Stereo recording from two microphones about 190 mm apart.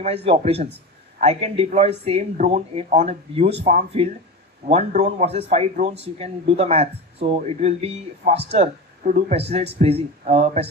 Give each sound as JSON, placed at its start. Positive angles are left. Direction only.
{"t": 0.0, "sound": "a man's voice", "side_deg": -30}